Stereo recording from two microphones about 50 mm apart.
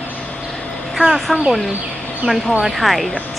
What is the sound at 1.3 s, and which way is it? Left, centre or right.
Speech, centre.